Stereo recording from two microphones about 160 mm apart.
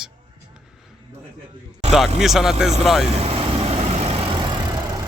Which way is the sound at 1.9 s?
Centre (ahead or behind).